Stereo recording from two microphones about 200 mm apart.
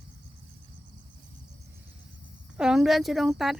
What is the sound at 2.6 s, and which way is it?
Speech, 5° right (ahead or behind).